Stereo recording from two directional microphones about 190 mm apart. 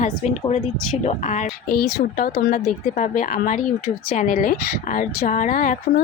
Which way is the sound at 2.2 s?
55° left (ahead or behind).